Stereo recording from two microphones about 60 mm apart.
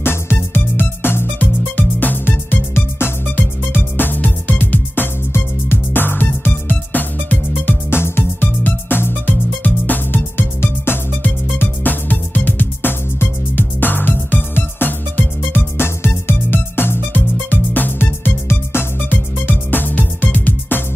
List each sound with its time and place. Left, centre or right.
0.0 s music: left